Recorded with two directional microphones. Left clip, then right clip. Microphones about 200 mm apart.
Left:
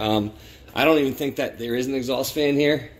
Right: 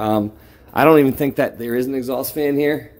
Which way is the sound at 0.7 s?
45° right (ahead or behind).